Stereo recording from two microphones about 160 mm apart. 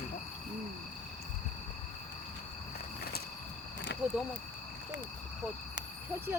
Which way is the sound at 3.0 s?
75° left (ahead or behind).